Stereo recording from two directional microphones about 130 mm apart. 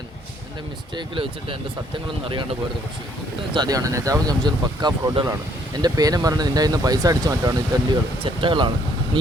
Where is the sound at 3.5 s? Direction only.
30° right (ahead or behind).